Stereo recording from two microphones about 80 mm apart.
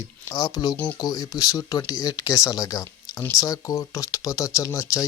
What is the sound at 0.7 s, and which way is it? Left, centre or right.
Speech, left.